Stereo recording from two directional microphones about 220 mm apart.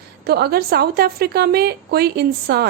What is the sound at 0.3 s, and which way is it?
A woman's voice, 45° right (ahead or behind).